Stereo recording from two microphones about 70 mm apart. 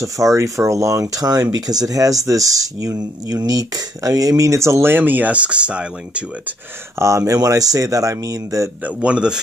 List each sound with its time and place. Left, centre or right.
0.0 s speech: right
4.9 s speech: right
7.0 s speech: right
7.4 s speech: right
8.8 s speech: centre